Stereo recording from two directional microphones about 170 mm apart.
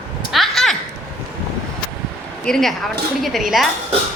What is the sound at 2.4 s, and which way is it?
A woman's voice, 5° left (ahead or behind).